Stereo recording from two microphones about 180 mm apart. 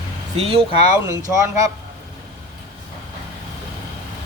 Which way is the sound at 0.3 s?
35° right (ahead or behind).